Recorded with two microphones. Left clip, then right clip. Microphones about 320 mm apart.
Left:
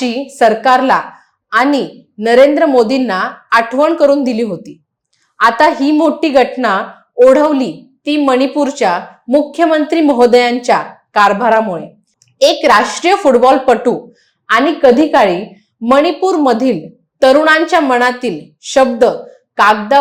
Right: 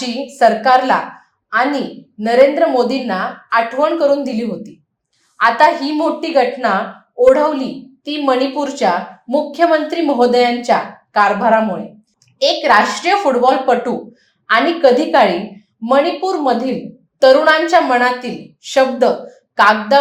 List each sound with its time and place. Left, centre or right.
0.0 s a woman's voice: left